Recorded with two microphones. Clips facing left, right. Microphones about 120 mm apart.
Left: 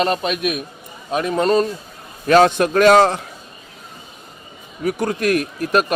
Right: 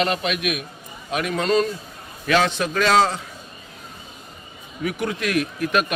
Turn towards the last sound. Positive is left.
turn(degrees=40)  # may be behind; listen again after turning